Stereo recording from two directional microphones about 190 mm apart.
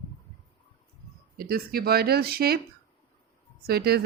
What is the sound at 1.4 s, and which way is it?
A woman's voice, 50° right (ahead or behind).